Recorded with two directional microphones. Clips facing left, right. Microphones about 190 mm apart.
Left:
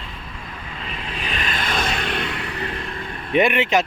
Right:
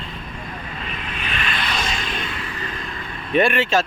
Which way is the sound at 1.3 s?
40° left (ahead or behind).